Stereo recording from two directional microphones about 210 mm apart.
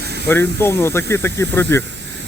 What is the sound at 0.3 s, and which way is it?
Speech, 10° left (ahead or behind).